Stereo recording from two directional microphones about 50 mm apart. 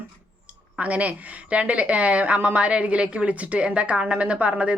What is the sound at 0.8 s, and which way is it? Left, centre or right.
Speech, right.